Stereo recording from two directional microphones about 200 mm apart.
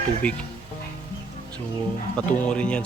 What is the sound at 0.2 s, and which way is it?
Speech, 5° left (ahead or behind).